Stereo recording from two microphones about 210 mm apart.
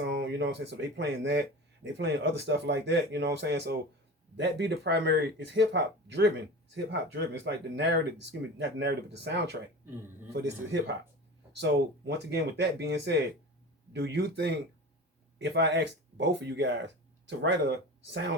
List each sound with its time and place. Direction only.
0.0 s speech: 55° right (ahead or behind)